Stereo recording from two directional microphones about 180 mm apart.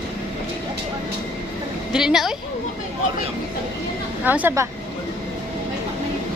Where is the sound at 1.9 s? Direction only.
5° right (ahead or behind).